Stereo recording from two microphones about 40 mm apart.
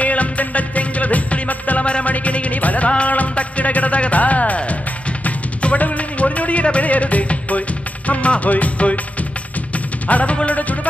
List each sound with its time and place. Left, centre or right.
0.0 s music: left
10.0 s music: left